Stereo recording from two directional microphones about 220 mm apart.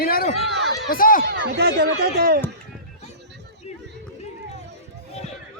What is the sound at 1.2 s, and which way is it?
Speech, 45° right (ahead or behind).